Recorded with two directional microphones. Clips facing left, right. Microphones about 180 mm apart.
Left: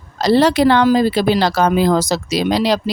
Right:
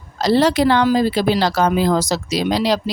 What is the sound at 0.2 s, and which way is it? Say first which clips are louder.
Speech: left 2 dB; 65° left (ahead or behind).